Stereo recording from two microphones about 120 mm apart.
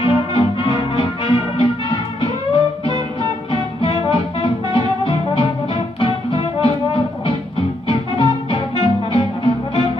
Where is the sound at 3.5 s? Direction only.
45° left (ahead or behind).